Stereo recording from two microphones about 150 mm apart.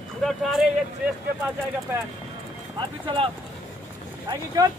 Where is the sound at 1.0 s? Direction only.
10° right (ahead or behind).